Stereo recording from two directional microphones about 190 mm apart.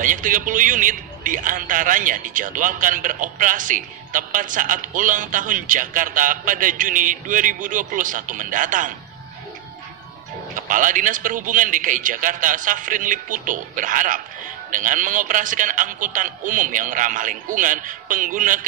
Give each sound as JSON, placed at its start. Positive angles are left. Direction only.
{"t": 0.0, "sound": "a man's voice", "side_deg": -45}
{"t": 10.5, "sound": "a man's voice", "side_deg": -45}